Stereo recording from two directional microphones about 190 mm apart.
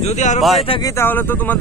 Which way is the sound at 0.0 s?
40° left (ahead or behind).